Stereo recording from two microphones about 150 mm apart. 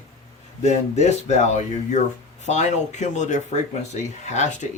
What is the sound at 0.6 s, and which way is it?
Speech, 50° left (ahead or behind).